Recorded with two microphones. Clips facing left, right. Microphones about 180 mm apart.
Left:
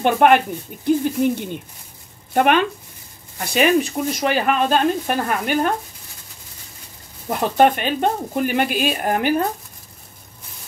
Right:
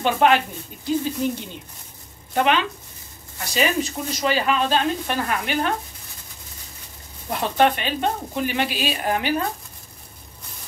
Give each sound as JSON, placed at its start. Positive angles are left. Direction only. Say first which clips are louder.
{"t": 0.0, "sound": "speech", "louder": "left 4 dB", "side_deg": 55}
{"t": 7.2, "sound": "speech", "louder": "left 4 dB", "side_deg": 50}